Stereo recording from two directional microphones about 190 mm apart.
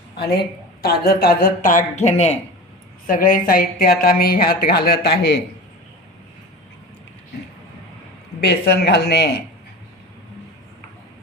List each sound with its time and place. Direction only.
0.2 s speech: 55° left (ahead or behind); by 2.4 s 35° left (ahead or behind)
3.1 s speech: 45° left (ahead or behind)
8.4 s speech: 60° left (ahead or behind)